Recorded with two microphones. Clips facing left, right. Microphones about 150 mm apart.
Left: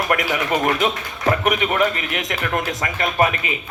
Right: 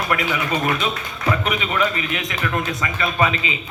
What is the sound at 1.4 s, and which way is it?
A man's voice, 55° left (ahead or behind).